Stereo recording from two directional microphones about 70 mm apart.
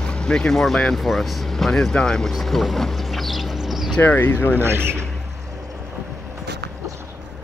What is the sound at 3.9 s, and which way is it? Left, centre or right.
Speech, left.